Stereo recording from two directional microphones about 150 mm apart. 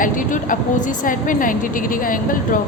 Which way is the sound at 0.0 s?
65° left (ahead or behind).